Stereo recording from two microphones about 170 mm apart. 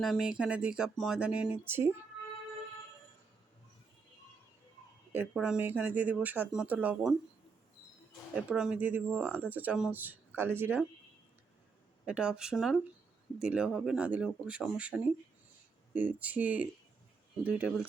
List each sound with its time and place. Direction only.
0.0 s speech: centre (ahead or behind)
5.1 s speech: 5° right (ahead or behind)
8.4 s speech: 5° right (ahead or behind)
12.0 s speech: 5° right (ahead or behind)